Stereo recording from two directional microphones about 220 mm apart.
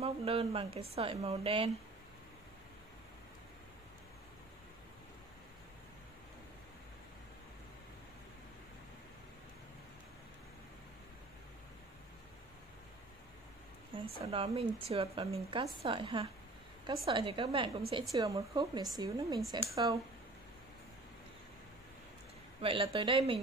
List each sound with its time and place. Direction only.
0.0 s speech: 25° right (ahead or behind)
14.2 s speech: 25° right (ahead or behind)
22.6 s speech: 25° right (ahead or behind)